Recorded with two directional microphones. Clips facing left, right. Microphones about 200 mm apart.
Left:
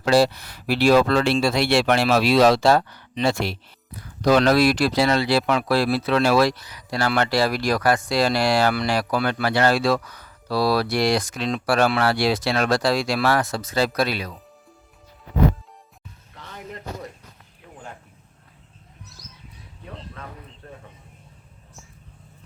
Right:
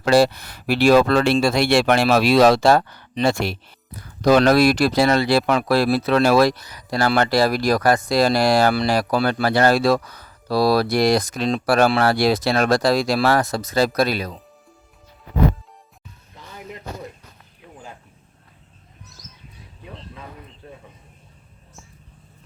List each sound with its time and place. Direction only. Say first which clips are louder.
0.0 s speech: right 2 dB; 55° right (ahead or behind)